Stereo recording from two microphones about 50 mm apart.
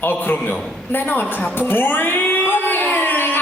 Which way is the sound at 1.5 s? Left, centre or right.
Left.